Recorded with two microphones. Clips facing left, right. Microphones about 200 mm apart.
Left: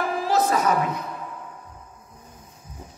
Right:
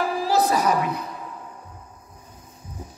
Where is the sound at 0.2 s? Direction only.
35° right (ahead or behind).